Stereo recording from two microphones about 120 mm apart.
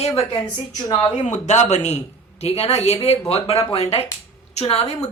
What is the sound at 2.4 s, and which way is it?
Speech, 60° left (ahead or behind).